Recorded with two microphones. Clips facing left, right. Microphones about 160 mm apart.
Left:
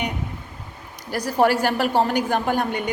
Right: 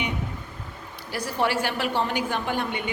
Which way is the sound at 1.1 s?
40° left (ahead or behind).